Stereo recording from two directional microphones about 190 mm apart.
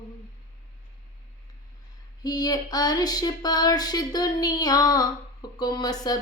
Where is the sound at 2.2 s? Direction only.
20° left (ahead or behind).